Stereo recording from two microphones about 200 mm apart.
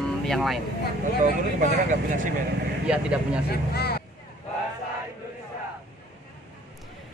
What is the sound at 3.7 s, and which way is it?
Speech, 50° left (ahead or behind).